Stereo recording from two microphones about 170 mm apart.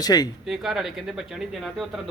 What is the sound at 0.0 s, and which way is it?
Speech, 20° left (ahead or behind).